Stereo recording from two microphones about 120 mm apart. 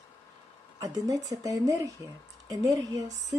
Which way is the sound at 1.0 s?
30° right (ahead or behind).